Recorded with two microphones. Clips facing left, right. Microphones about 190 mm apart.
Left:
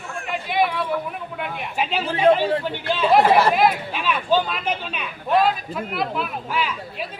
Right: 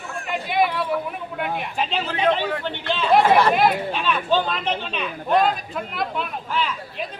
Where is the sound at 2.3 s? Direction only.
30° left (ahead or behind).